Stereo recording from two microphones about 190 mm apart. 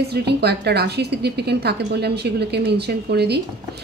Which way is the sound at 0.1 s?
60° right (ahead or behind).